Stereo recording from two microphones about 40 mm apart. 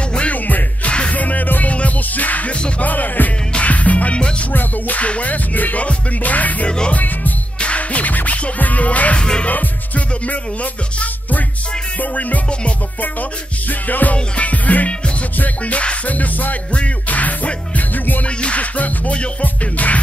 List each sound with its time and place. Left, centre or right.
0.3 s music: left
5.0 s music: left
7.6 s music: left
9.2 s music: centre
9.5 s music: left
13.7 s music: left
14.1 s music: left
18.2 s music: left